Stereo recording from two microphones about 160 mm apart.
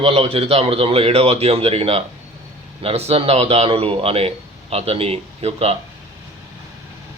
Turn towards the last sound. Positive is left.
turn(degrees=-40)  # may be behind; listen again after turning